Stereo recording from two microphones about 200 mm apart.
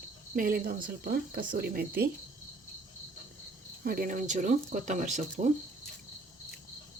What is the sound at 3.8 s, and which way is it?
Speech, 45° right (ahead or behind).